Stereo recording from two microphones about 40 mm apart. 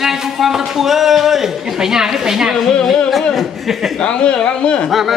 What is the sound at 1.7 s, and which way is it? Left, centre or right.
Speech, centre.